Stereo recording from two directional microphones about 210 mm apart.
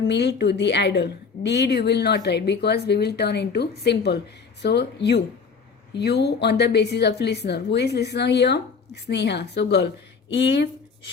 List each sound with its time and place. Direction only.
0.0 s a woman's voice: 55° left (ahead or behind)